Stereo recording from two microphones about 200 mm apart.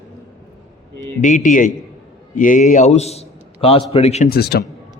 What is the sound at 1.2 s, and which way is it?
A man's voice, 40° left (ahead or behind).